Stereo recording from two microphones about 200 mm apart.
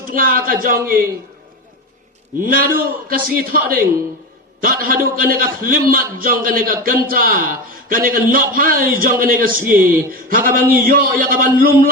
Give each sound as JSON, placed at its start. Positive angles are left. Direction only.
{"t": 0.1, "sound": "a man's voice", "side_deg": -45}
{"t": 2.4, "sound": "a man's voice", "side_deg": -45}